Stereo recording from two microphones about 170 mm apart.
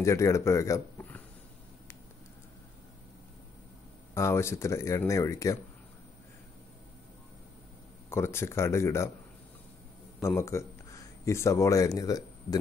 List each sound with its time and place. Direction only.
0.0 s a man's voice: 15° left (ahead or behind)
4.1 s speech: 15° left (ahead or behind)
8.1 s speech: 15° left (ahead or behind)
10.2 s speech: 15° left (ahead or behind)